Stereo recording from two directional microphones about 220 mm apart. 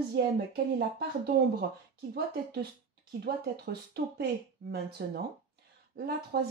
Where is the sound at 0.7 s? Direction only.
45° right (ahead or behind).